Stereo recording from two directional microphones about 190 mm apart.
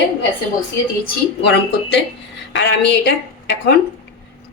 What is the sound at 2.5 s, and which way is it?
Speech, 60° left (ahead or behind).